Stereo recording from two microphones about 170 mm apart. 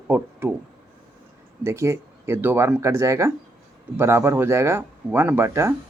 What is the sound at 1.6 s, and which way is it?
Speech, 15° right (ahead or behind).